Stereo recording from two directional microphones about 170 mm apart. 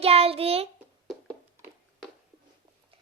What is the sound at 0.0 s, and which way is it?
Child singing, 35° right (ahead or behind).